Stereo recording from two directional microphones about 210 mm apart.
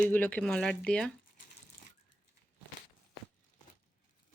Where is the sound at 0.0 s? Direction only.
5° left (ahead or behind).